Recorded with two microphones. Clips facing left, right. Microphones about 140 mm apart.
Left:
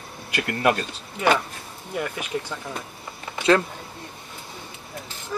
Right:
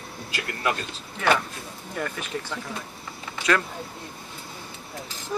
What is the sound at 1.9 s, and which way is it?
Speech, 10° left (ahead or behind).